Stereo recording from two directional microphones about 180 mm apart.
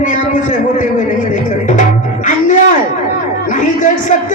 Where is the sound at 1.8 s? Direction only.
45° left (ahead or behind).